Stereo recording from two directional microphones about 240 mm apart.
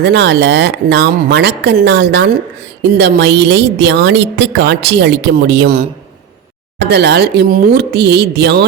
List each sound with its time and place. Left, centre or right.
0.0 s a woman's voice: right